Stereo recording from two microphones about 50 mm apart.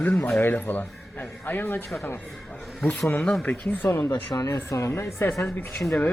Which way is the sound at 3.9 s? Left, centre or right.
Left.